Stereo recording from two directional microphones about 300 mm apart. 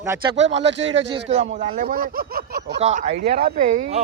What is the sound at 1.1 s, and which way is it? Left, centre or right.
Speech, right.